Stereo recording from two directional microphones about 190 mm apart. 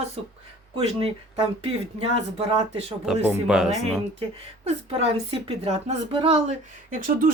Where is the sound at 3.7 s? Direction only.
35° right (ahead or behind).